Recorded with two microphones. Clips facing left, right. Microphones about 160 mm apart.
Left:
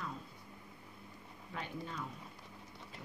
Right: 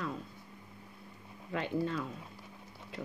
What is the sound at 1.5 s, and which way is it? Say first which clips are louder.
Speech: right 10 dB; 80° right.